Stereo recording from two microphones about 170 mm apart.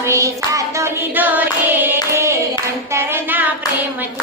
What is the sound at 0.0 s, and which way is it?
Hands, 15° right (ahead or behind).